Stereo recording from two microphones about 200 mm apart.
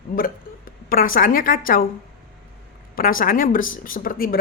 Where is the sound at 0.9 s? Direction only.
45° left (ahead or behind).